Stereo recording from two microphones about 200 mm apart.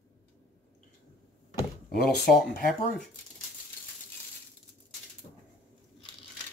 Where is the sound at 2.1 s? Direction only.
50° left (ahead or behind).